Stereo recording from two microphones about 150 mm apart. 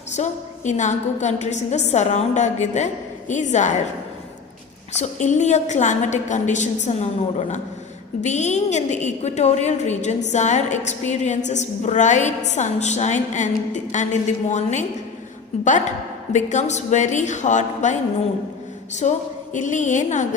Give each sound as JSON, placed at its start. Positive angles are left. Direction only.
{"t": 0.1, "sound": "a woman's voice", "side_deg": 50}
{"t": 5.2, "sound": "a woman's voice", "side_deg": 50}
{"t": 19.0, "sound": "a woman's voice", "side_deg": 50}